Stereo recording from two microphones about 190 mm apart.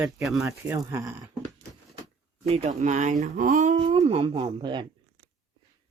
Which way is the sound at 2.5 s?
40° right (ahead or behind).